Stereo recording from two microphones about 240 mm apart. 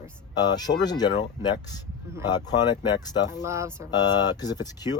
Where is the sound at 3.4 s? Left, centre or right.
Centre.